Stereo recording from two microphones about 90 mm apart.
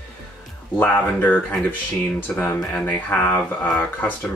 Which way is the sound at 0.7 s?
20° left (ahead or behind).